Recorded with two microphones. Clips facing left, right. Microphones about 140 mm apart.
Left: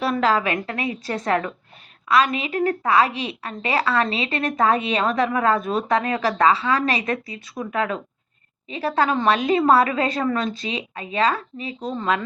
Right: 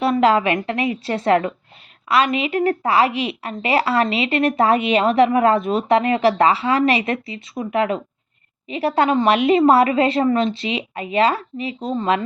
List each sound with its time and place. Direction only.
0.0 s speech: 25° right (ahead or behind)